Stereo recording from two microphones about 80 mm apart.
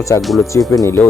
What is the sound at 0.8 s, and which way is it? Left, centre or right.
Speech, left.